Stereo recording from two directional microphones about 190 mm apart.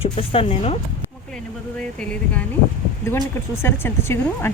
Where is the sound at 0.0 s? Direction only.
30° left (ahead or behind).